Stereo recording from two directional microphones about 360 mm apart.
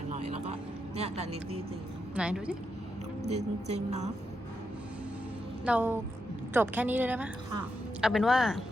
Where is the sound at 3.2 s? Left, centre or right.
Centre.